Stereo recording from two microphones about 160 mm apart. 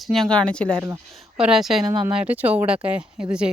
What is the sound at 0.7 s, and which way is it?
Speech, 20° right (ahead or behind).